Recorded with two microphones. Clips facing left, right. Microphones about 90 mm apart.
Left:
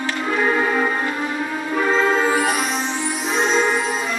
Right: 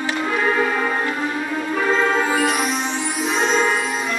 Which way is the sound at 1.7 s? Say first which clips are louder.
Left 1 dB; centre (ahead or behind).